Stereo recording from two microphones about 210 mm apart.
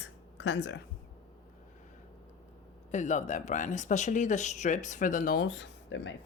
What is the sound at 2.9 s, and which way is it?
Speech, 35° left (ahead or behind).